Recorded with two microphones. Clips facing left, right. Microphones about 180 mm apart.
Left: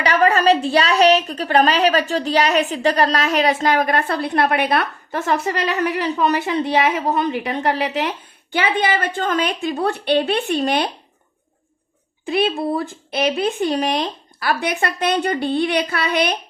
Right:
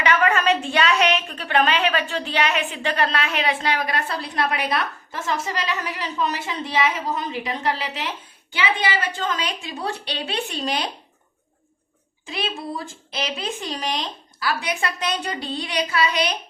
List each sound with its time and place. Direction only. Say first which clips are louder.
0.0 s a woman's voice: left 4 dB; 35° left (ahead or behind); by 10.8 s 55° left (ahead or behind)
12.2 s a woman's voice: left 10 dB; 60° left (ahead or behind)